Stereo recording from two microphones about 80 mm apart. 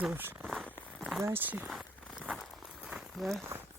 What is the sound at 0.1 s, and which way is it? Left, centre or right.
Speech, right.